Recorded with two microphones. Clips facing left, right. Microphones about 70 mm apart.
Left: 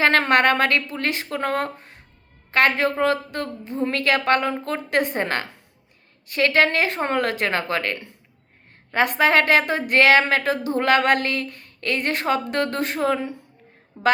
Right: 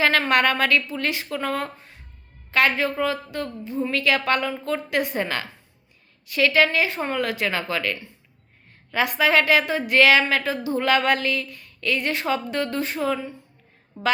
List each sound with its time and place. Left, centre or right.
0.2 s a woman's voice: left